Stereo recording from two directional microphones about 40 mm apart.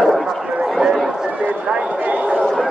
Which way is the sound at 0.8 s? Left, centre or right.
Centre.